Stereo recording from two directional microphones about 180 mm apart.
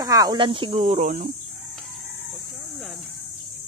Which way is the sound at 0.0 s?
20° right (ahead or behind).